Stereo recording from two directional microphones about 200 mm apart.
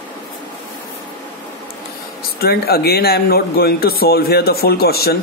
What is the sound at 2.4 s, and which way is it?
Speech, 50° left (ahead or behind).